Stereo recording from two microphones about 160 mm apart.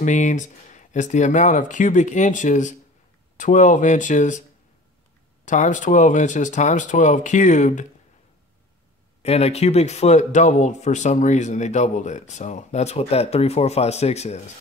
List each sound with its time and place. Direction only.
0.0 s speech: 50° left (ahead or behind)
5.4 s speech: 50° left (ahead or behind)
9.2 s speech: 40° left (ahead or behind)